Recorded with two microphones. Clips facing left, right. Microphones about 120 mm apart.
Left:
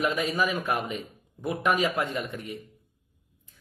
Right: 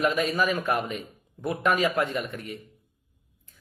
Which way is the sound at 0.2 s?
15° left (ahead or behind).